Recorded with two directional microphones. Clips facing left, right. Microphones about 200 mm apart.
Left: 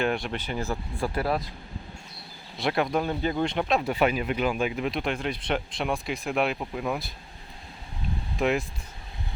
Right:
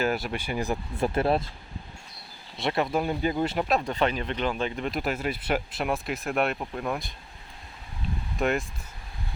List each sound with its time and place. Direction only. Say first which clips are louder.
0.0 s speech: even; 5° right (ahead or behind); by 1.5 s 25° right (ahead or behind)
2.6 s speech: left 1 dB; centre (ahead or behind)
8.4 s speech: left 1 dB; centre (ahead or behind)